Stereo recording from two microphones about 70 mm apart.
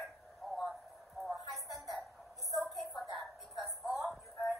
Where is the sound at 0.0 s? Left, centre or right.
Centre.